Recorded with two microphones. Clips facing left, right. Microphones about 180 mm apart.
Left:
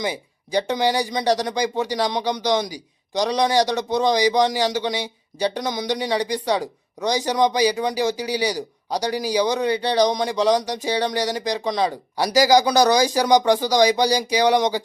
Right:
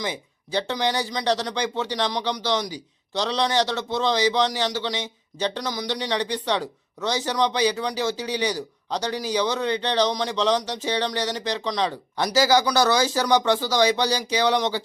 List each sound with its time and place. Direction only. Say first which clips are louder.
0.0 s speech: left 4 dB; 15° left (ahead or behind)